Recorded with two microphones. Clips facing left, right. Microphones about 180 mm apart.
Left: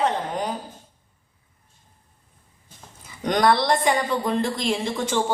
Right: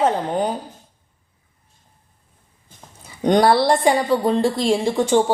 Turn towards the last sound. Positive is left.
turn(degrees=-35)  # may be behind; listen again after turning